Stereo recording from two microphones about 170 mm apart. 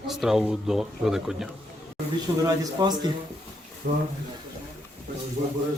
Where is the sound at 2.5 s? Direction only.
25° right (ahead or behind).